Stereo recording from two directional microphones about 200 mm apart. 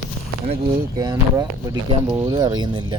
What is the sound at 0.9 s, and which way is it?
Speech, 20° right (ahead or behind).